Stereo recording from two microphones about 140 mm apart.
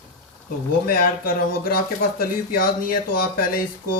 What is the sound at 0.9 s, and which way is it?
Speech, 90° left.